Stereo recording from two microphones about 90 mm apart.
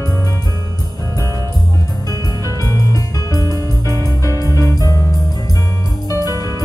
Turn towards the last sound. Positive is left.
turn(degrees=40)  # may be behind; listen again after turning